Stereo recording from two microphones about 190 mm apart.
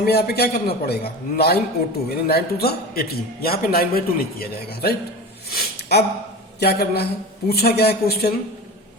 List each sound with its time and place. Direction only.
0.0 s a man's voice: 55° left (ahead or behind)
5.5 s a sound: 55° left (ahead or behind)
6.6 s a man's voice: 55° left (ahead or behind)